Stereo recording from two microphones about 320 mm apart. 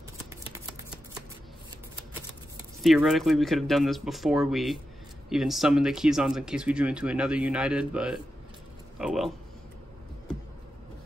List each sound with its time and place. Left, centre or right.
2.8 s speech: centre